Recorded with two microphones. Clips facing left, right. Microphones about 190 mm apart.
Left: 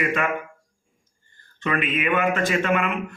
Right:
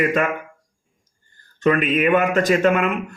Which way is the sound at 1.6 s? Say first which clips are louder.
Right 7 dB; 40° right (ahead or behind).